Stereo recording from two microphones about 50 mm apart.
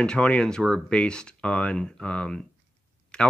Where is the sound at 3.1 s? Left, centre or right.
Centre.